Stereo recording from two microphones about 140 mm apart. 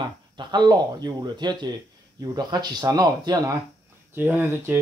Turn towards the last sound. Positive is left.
turn(degrees=-15)  # may be behind; listen again after turning